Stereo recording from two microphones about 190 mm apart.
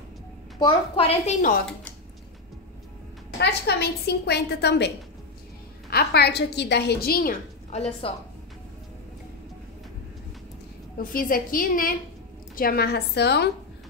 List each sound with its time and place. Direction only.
0.6 s a woman's voice: 25° left (ahead or behind)
3.3 s a woman's voice: 60° left (ahead or behind)
7.7 s a woman's voice: 35° left (ahead or behind)
11.0 s a woman's voice: 50° left (ahead or behind)